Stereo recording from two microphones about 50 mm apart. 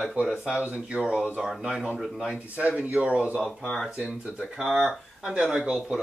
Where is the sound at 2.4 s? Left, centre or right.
Right.